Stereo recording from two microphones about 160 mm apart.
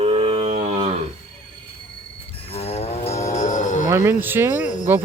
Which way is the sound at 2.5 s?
40° left (ahead or behind).